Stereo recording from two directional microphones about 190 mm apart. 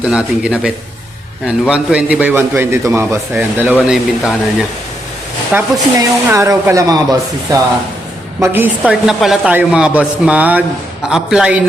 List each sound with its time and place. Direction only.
0.0 s a woman's voice: 5° right (ahead or behind)
5.5 s a woman's voice: 10° right (ahead or behind)